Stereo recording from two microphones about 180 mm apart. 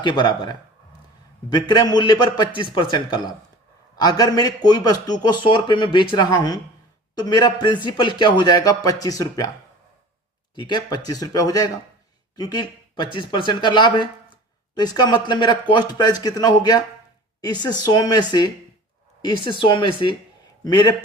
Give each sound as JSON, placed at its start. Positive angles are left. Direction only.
{"t": 0.0, "sound": "a man's voice", "side_deg": 25}
{"t": 10.5, "sound": "a man's voice", "side_deg": 25}